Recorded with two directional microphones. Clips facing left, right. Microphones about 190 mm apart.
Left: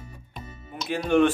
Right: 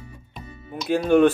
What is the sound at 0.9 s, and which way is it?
Speech, 40° right (ahead or behind).